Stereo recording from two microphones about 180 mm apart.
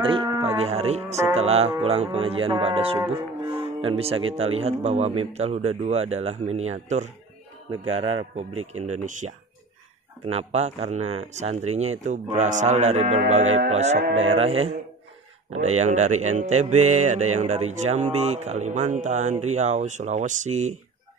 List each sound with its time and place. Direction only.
0.0 s music: 30° right (ahead or behind)
1.3 s speech: 35° right (ahead or behind)
14.0 s speech: 90° right
14.3 s speech: 35° right (ahead or behind)